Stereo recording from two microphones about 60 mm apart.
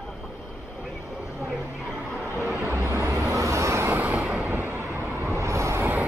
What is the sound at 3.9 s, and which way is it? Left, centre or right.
Vehicle, right.